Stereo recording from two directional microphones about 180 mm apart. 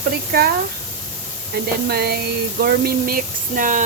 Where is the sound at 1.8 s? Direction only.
60° right (ahead or behind).